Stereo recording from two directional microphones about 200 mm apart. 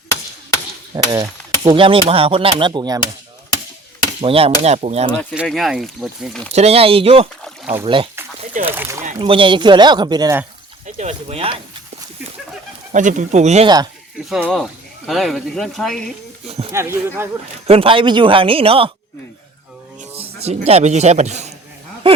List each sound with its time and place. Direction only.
0.9 s speech: 15° right (ahead or behind)
4.2 s speech: 30° right (ahead or behind)
5.3 s speech: 5° right (ahead or behind)
6.5 s speech: 30° right (ahead or behind)
8.7 s speech: 10° right (ahead or behind)
9.2 s speech: 25° right (ahead or behind)
10.8 s speech: 35° right (ahead or behind)
12.9 s speech: 40° right (ahead or behind)
14.3 s speech: 5° right (ahead or behind)
16.5 s a sound: 30° right (ahead or behind)
16.7 s speech: 15° right (ahead or behind)
17.7 s speech: 25° right (ahead or behind)
20.0 s speech: 30° right (ahead or behind)